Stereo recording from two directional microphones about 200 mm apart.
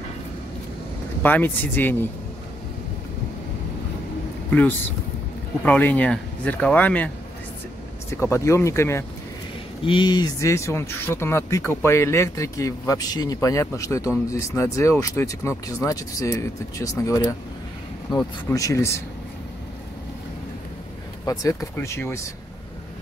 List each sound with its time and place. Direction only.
1.2 s speech: 10° left (ahead or behind)
4.5 s speech: 10° left (ahead or behind)
8.1 s speech: 15° left (ahead or behind)
21.3 s speech: 15° left (ahead or behind)